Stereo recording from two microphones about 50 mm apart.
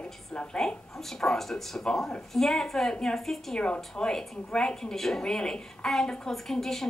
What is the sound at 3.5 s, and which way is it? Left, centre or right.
A woman's voice, left.